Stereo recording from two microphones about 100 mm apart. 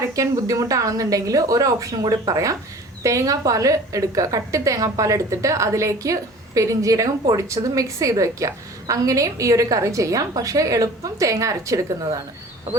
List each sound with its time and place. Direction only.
0.1 s a woman's voice: 35° right (ahead or behind)